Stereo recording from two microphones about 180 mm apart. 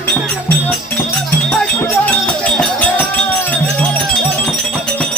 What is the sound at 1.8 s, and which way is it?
Music, 10° left (ahead or behind).